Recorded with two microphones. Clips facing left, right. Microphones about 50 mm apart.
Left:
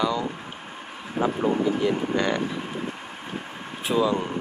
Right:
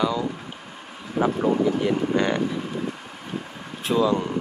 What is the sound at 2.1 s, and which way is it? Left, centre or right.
Speech, centre.